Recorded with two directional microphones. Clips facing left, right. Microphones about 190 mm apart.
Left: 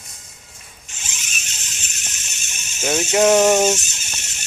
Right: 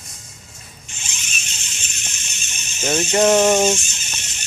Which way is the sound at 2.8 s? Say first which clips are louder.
Even; 5° left (ahead or behind).